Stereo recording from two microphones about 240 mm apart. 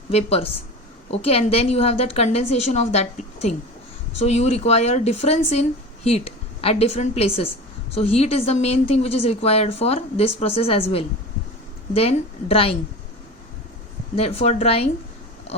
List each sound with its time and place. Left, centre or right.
0.1 s speech: left
14.2 s speech: left